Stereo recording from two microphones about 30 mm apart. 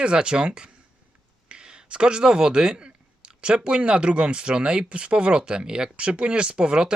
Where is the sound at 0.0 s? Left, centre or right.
Right.